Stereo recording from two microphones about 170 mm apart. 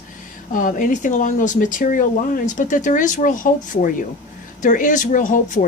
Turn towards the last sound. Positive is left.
turn(degrees=50)  # may be behind; listen again after turning